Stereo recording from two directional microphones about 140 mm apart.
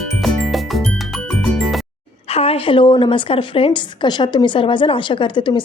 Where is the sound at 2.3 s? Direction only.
45° left (ahead or behind).